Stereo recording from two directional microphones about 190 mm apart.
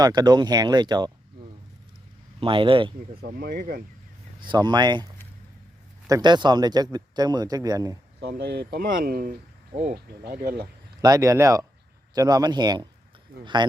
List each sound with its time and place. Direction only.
0.0 s speech: 20° right (ahead or behind)
2.4 s speech: 25° right (ahead or behind)
3.2 s speech: 55° right (ahead or behind)
4.4 s speech: 25° right (ahead or behind)
6.1 s speech: 20° right (ahead or behind)
8.2 s speech: 60° right (ahead or behind)
11.0 s speech: 15° right (ahead or behind)